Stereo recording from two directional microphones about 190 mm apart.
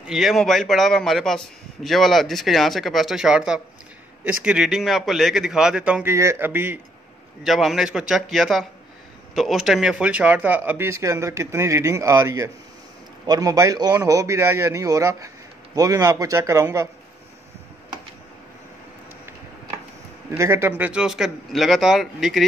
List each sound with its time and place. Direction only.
0.0 s a man's voice: centre (ahead or behind)
20.2 s a man's voice: 15° right (ahead or behind)